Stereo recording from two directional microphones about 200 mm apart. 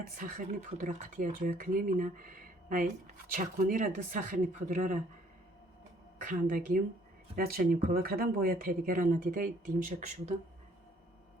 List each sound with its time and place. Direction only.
0.2 s speech: 40° right (ahead or behind)
6.2 s speech: 40° right (ahead or behind)